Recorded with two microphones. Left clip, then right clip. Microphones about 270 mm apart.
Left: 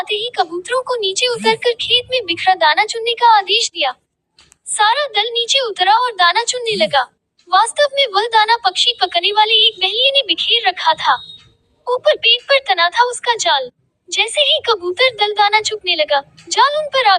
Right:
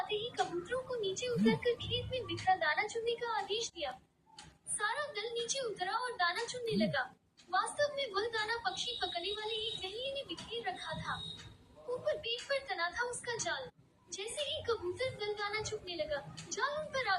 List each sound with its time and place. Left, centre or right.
0.0 s a woman's voice: left